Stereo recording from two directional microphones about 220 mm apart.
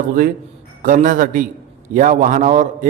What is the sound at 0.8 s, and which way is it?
A man's voice, 35° right (ahead or behind).